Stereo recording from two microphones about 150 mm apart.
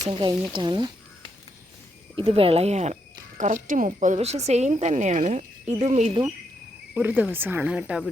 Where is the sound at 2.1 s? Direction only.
40° right (ahead or behind).